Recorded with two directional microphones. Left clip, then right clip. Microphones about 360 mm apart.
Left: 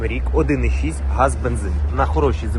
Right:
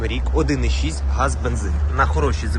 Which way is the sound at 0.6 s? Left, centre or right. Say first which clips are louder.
Even; right.